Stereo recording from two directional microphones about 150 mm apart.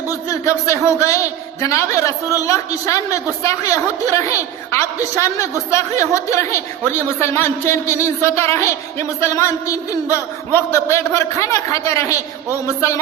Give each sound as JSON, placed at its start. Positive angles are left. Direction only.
{"t": 0.1, "sound": "a man's voice", "side_deg": 20}